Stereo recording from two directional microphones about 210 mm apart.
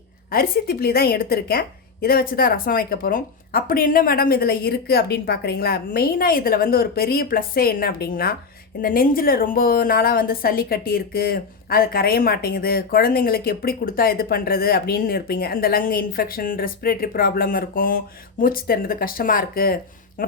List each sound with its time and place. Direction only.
0.3 s a woman's voice: 45° left (ahead or behind)